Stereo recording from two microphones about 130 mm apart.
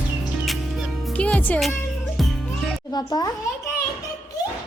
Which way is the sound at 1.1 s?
10° left (ahead or behind).